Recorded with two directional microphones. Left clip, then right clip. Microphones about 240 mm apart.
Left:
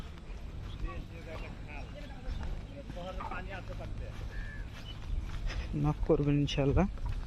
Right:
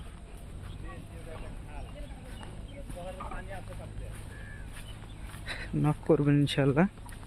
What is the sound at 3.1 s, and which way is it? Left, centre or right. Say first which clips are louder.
Vehicle: left 1 dB; left.